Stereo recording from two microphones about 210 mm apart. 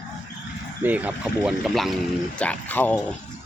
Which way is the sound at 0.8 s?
10° right (ahead or behind).